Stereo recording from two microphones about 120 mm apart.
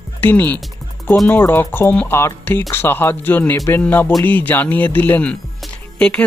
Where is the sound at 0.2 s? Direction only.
15° left (ahead or behind).